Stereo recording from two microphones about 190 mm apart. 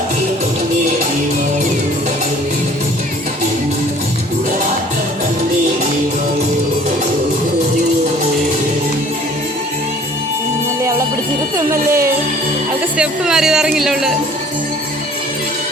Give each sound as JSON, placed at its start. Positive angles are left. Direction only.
{"t": 11.5, "sound": "music", "side_deg": -15}
{"t": 13.0, "sound": "music", "side_deg": -5}